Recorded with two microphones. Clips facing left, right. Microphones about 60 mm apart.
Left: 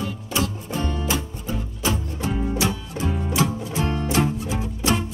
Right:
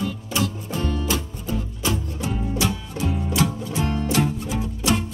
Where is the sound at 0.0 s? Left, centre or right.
Centre.